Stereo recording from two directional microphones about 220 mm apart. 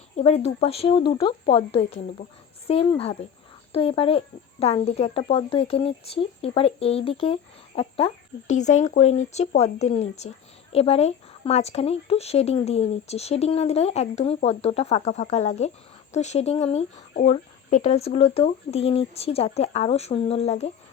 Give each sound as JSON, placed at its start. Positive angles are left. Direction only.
{"t": 0.2, "sound": "speech", "side_deg": 30}